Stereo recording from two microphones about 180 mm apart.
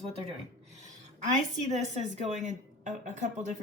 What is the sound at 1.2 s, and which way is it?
A woman's voice, 40° right (ahead or behind).